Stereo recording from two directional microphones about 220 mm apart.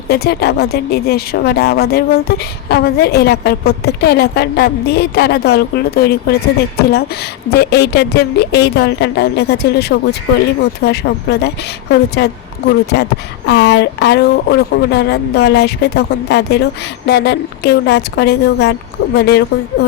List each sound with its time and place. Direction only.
0.1 s speech: 45° left (ahead or behind)
7.5 s speech: 50° left (ahead or behind)